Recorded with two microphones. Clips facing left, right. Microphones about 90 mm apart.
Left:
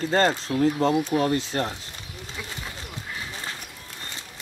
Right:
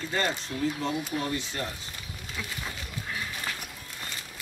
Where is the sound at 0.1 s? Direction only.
55° left (ahead or behind).